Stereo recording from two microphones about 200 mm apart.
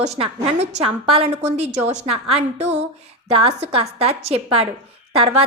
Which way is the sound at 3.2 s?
30° right (ahead or behind).